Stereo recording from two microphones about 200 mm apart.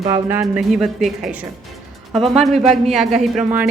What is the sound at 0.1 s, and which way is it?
A woman's voice, 10° right (ahead or behind).